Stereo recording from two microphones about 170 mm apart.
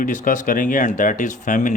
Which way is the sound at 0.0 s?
50° left (ahead or behind).